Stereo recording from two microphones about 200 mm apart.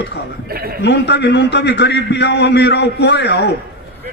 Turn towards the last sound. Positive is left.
turn(degrees=55)  # may be behind; listen again after turning